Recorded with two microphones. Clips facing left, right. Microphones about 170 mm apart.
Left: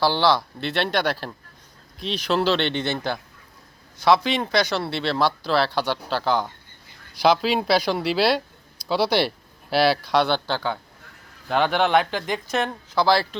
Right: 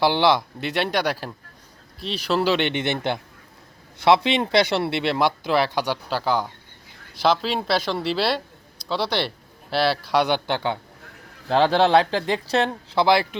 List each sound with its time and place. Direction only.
0.0 s speech: 20° right (ahead or behind)
7.2 s speech: 5° left (ahead or behind)
10.1 s speech: 15° right (ahead or behind)